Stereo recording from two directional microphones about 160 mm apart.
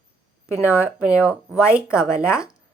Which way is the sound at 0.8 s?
10° right (ahead or behind).